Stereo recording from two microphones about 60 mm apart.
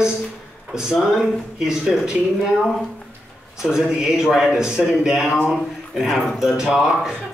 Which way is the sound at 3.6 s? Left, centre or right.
Centre.